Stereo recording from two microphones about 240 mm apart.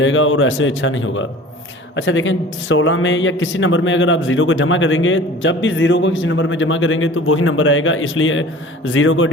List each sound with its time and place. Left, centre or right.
0.0 s speech: left